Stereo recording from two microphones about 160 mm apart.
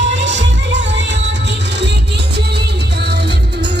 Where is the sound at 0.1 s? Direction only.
90° right.